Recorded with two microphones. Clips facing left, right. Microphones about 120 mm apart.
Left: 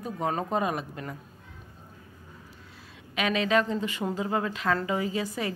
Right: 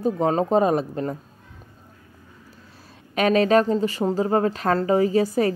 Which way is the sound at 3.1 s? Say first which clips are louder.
Right 8 dB; 45° right (ahead or behind).